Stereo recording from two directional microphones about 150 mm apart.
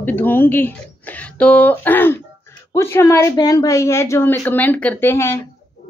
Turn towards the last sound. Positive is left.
turn(degrees=15)  # may be behind; listen again after turning